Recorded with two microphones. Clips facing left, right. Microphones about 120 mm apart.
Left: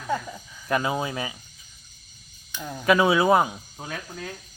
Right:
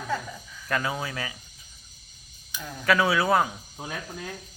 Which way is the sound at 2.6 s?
20° left (ahead or behind).